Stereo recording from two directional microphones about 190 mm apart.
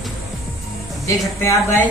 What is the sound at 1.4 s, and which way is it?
Speech, 15° left (ahead or behind).